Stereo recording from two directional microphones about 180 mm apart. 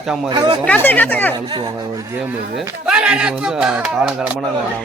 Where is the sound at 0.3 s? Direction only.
25° right (ahead or behind).